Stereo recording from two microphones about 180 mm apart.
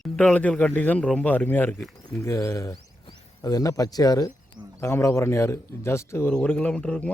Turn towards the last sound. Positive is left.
turn(degrees=5)  # may be behind; listen again after turning